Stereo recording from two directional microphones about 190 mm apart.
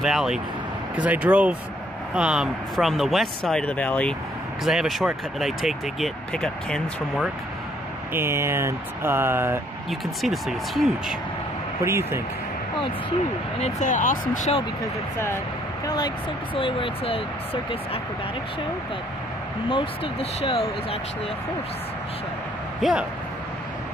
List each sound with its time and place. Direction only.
0.0 s speech: 5° right (ahead or behind)
8.1 s speech: 15° right (ahead or behind)
9.8 s speech: centre (ahead or behind)
11.8 s speech: 15° right (ahead or behind)
13.6 s speech: 35° left (ahead or behind)
15.1 s speech: 15° left (ahead or behind)
16.5 s speech: 25° left (ahead or behind)
19.7 s speech: 30° left (ahead or behind)
22.8 s speech: centre (ahead or behind)